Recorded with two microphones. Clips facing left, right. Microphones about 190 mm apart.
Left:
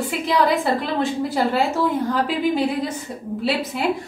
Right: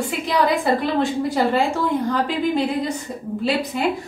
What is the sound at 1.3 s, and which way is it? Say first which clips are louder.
A woman's voice: right 1 dB; 5° left (ahead or behind).